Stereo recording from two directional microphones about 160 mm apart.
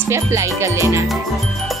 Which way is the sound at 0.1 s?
15° right (ahead or behind).